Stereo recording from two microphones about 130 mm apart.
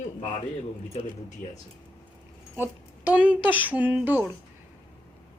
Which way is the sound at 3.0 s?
10° right (ahead or behind).